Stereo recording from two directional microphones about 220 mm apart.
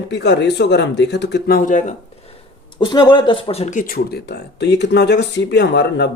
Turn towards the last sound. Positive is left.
turn(degrees=50)  # may be behind; listen again after turning